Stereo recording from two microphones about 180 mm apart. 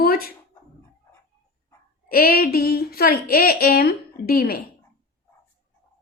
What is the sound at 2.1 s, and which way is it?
A woman's voice, 55° left (ahead or behind).